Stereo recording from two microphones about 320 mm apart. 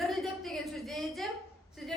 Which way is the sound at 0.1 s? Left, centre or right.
Centre.